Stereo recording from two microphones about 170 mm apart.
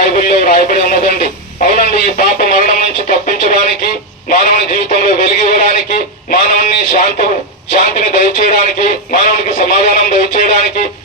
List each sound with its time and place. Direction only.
0.0 s radio: 50° left (ahead or behind)
4.3 s a sound: 50° left (ahead or behind)
9.1 s a man's voice: 45° left (ahead or behind)